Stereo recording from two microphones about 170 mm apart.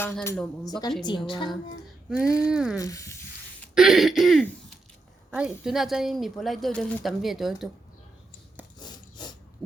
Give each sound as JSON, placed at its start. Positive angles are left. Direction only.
{"t": 0.0, "sound": "speech", "side_deg": 5}
{"t": 0.6, "sound": "speech", "side_deg": 20}
{"t": 2.5, "sound": "speech", "side_deg": -5}
{"t": 2.7, "sound": "speech", "side_deg": 20}
{"t": 3.8, "sound": "speech", "side_deg": 0}
{"t": 8.8, "sound": "filing", "side_deg": 25}
{"t": 9.6, "sound": "a sound", "side_deg": 0}